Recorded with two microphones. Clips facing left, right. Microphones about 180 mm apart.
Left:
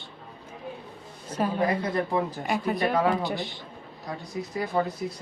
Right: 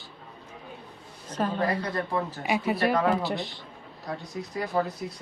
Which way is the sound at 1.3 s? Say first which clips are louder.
Left 2 dB; 10° left (ahead or behind).